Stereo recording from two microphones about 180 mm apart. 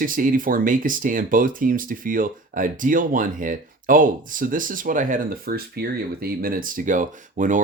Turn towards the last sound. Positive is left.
turn(degrees=-45)  # may be behind; listen again after turning